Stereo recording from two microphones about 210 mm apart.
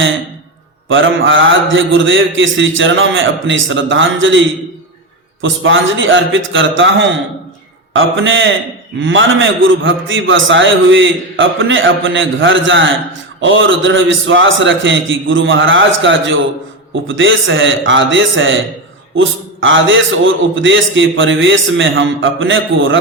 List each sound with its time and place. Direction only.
0.9 s a man's voice: 65° right (ahead or behind)